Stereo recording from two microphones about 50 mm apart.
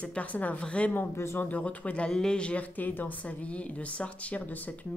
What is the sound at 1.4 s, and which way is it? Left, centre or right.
Speech, left.